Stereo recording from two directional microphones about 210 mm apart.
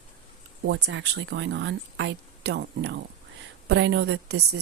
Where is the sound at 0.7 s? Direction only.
55° right (ahead or behind).